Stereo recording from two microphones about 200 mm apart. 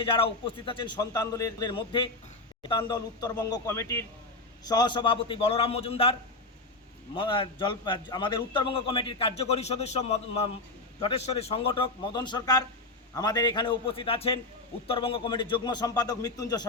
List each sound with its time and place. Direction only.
0.0 s a man's voice: 25° left (ahead or behind)
7.2 s a man's voice: 25° left (ahead or behind)